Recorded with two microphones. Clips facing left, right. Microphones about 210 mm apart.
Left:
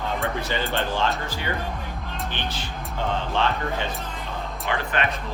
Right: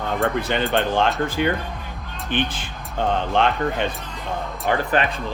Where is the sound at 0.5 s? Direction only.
65° right (ahead or behind).